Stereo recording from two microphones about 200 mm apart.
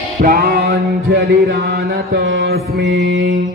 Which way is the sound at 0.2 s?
50° right (ahead or behind).